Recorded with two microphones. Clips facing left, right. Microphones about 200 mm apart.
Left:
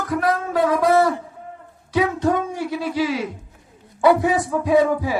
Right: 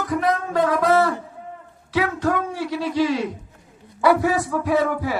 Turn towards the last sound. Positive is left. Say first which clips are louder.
# left 4 dB
turn(degrees=15)  # may be behind; listen again after turning